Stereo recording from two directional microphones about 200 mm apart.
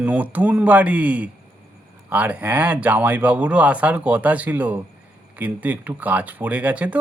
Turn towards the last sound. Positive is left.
turn(degrees=-5)  # may be behind; listen again after turning